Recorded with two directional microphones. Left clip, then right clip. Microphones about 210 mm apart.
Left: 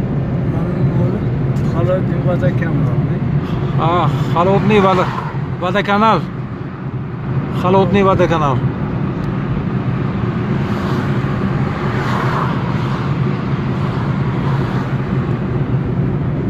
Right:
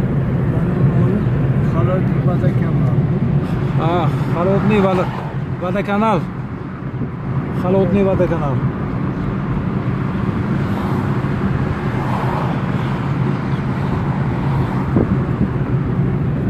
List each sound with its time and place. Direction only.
3.8 s speech: 5° left (ahead or behind)
7.6 s speech: 20° left (ahead or behind)